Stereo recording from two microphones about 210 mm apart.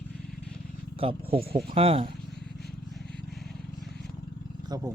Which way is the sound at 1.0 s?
25° right (ahead or behind).